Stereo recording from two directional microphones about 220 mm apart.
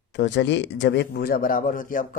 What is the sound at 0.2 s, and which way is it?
Speech, 55° left (ahead or behind).